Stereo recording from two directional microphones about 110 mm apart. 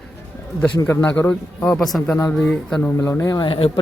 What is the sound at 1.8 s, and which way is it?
Speech, centre (ahead or behind).